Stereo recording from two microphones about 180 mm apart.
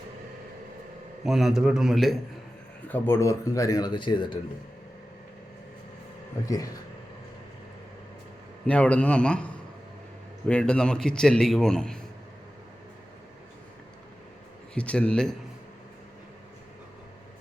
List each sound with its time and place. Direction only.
1.2 s a man's voice: centre (ahead or behind)
2.9 s speech: 15° left (ahead or behind)
6.4 s speech: 20° left (ahead or behind)
8.6 s a man's voice: 5° left (ahead or behind)
10.5 s a man's voice: 5° left (ahead or behind)
14.8 s a man's voice: 5° left (ahead or behind)